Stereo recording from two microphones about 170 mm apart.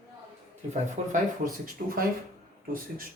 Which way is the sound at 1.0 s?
40° right (ahead or behind).